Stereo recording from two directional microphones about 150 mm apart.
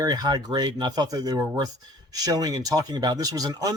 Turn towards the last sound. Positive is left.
turn(degrees=-25)  # may be behind; listen again after turning